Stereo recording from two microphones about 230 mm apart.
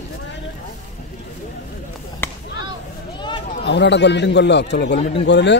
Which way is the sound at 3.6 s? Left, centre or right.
Left.